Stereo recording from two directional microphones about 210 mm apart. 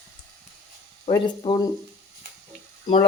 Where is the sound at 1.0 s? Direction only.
20° left (ahead or behind).